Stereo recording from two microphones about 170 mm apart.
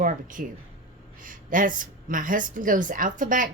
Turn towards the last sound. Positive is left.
turn(degrees=-50)  # may be behind; listen again after turning